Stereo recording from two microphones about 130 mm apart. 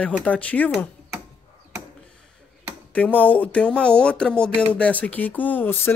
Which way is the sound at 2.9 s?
10° left (ahead or behind).